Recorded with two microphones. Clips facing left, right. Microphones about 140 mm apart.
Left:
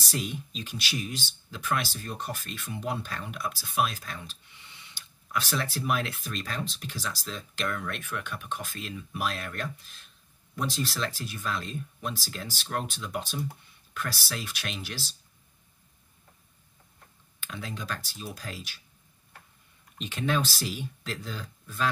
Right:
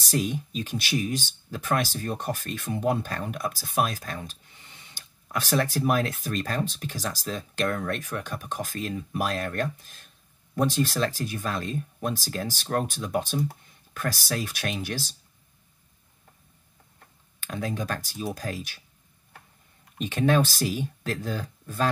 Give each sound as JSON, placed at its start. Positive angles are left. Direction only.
{"t": 0.0, "sound": "speech", "side_deg": -45}
{"t": 17.4, "sound": "speech", "side_deg": -45}
{"t": 20.0, "sound": "speech", "side_deg": -45}